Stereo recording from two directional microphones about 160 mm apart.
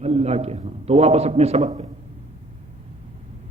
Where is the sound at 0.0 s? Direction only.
40° right (ahead or behind).